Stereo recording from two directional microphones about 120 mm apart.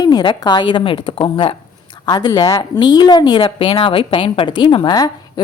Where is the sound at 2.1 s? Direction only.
35° left (ahead or behind).